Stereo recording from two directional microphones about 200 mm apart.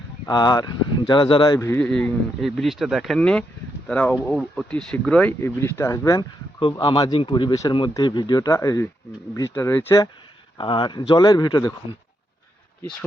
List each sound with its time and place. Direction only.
0.3 s speech: 20° left (ahead or behind)
6.6 s speech: 25° left (ahead or behind)